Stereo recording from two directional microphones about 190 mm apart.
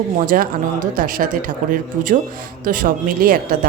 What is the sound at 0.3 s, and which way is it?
Speech, 45° right (ahead or behind).